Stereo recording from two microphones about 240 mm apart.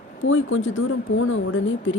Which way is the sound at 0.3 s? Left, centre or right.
Left.